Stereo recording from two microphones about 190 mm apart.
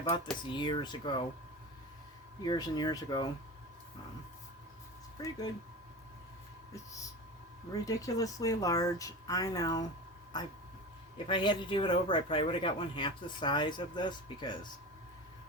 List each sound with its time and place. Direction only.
0.1 s speech: 25° left (ahead or behind)
2.4 s speech: 20° left (ahead or behind)
5.1 s speech: 20° left (ahead or behind)
7.7 s speech: 20° left (ahead or behind)
11.3 s speech: 25° left (ahead or behind)